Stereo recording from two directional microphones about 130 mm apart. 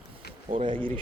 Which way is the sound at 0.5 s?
40° right (ahead or behind).